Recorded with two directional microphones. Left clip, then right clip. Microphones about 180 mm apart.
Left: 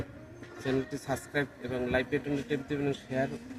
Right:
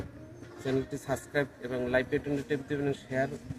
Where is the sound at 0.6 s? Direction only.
10° right (ahead or behind).